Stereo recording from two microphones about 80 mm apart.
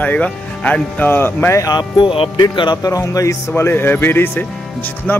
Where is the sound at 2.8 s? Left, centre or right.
Left.